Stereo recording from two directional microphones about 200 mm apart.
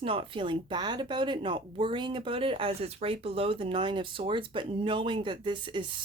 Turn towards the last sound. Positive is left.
turn(degrees=-25)  # may be behind; listen again after turning